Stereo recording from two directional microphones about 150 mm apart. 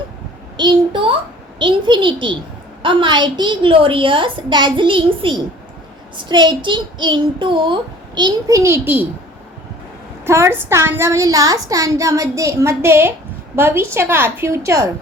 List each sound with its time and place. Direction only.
0.5 s a woman's voice: 30° right (ahead or behind); by 9.0 s 15° right (ahead or behind)
10.2 s a woman's voice: 20° right (ahead or behind)